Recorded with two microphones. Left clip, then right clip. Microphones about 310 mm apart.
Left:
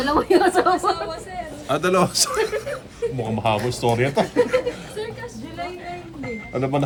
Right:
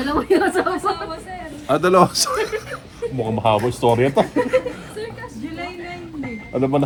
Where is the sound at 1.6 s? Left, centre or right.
Centre.